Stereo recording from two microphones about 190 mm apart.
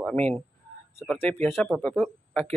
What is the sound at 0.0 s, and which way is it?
Speech, 5° left (ahead or behind).